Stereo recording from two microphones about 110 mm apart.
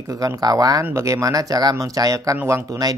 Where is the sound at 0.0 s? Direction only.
30° right (ahead or behind).